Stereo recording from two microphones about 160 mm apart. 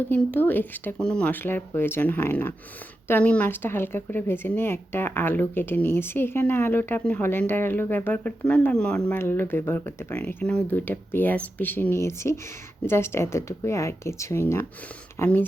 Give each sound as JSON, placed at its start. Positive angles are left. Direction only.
{"t": 0.1, "sound": "speech", "side_deg": 10}